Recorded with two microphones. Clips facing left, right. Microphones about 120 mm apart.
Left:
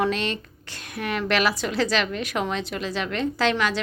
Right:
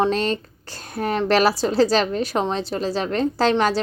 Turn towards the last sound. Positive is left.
turn(degrees=-35)  # may be behind; listen again after turning